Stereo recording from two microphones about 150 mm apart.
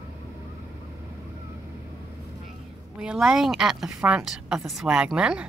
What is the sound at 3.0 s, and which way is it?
A woman's voice, 5° right (ahead or behind).